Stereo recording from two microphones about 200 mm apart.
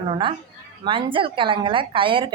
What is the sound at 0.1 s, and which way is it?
A woman's voice, 25° right (ahead or behind).